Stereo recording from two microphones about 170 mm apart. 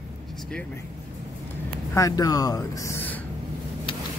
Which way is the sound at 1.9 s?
20° left (ahead or behind).